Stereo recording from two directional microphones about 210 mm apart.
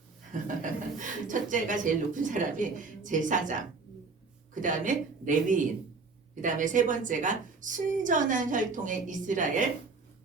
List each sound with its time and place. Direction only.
0.4 s a woman's voice: 40° right (ahead or behind)
4.6 s a woman's voice: 40° right (ahead or behind)